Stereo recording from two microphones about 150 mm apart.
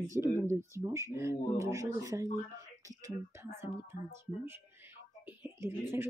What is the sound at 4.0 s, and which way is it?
Speech, 55° left (ahead or behind).